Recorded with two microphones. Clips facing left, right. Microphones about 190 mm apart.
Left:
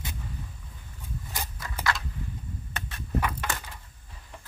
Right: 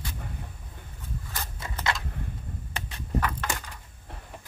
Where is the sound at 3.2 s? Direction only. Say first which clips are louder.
Even; 10° left (ahead or behind).